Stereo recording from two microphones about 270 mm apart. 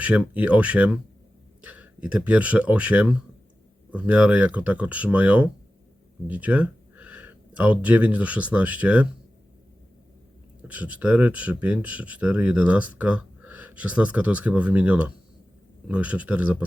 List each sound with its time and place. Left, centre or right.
0.0 s speech: centre
10.6 s speech: centre